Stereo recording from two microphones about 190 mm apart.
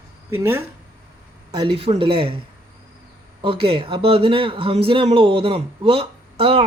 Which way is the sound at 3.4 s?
30° right (ahead or behind).